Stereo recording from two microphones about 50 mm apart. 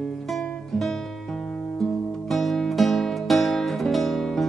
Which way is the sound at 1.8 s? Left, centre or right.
Centre.